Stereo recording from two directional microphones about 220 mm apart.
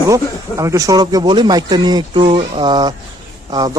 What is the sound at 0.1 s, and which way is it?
Speech, 15° right (ahead or behind).